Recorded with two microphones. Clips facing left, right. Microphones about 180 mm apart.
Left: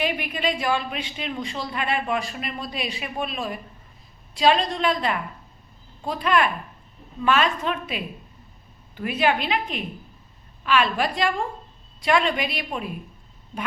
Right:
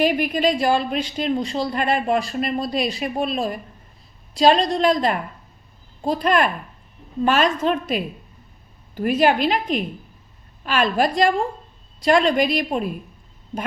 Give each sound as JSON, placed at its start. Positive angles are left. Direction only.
{"t": 0.0, "sound": "a woman's voice", "side_deg": -40}